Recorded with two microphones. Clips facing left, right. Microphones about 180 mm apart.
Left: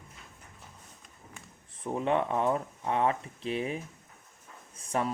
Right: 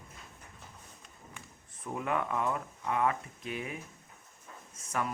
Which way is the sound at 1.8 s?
30° left (ahead or behind).